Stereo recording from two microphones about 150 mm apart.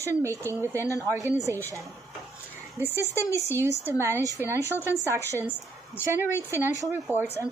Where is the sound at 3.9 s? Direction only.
15° right (ahead or behind).